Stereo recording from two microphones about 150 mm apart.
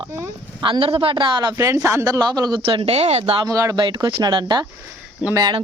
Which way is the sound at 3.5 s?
25° right (ahead or behind).